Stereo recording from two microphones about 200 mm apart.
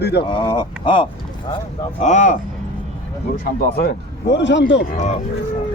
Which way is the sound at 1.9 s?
35° left (ahead or behind).